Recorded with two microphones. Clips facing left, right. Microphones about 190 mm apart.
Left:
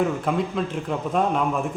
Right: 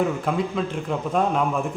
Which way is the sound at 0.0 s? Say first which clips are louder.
Even; centre (ahead or behind).